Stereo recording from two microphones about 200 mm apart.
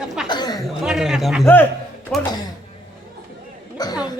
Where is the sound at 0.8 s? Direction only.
Centre (ahead or behind).